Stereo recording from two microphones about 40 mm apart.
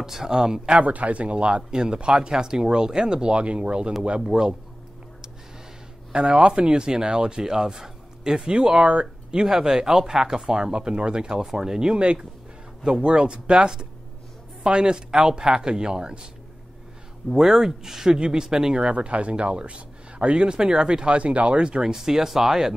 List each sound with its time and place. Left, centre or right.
0.0 s speech: centre
0.7 s speech: right
4.3 s speech: centre
6.1 s speech: right
11.9 s speech: right
17.3 s speech: centre
21.8 s speech: centre